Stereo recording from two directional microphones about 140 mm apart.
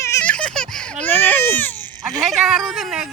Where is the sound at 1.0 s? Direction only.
15° left (ahead or behind).